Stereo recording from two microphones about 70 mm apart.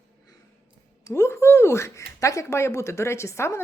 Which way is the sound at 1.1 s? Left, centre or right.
Left.